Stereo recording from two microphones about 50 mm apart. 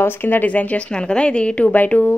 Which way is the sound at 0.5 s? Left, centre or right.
Left.